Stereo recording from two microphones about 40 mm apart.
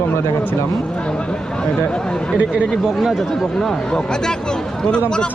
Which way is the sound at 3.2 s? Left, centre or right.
Centre.